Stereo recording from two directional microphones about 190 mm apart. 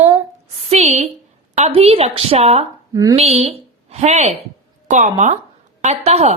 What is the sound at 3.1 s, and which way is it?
A woman's voice, 35° right (ahead or behind).